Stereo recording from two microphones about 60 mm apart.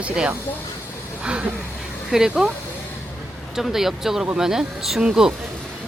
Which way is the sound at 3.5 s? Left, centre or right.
Centre.